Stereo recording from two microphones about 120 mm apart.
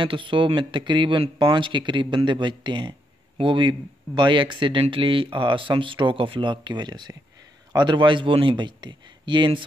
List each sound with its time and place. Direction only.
0.0 s speech: 45° right (ahead or behind)